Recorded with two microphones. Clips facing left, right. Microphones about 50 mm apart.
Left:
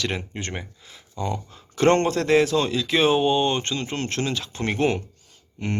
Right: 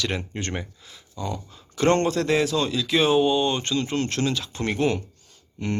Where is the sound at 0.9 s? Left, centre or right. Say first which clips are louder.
Left 6 dB; left.